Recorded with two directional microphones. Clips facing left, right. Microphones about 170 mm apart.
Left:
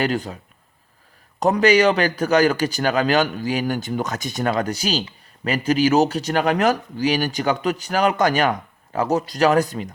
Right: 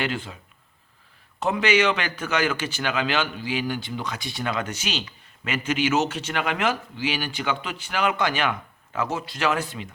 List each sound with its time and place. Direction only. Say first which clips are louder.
0.0 s speech: left 6 dB; 40° left (ahead or behind)
1.4 s speech: left 6 dB; 40° left (ahead or behind)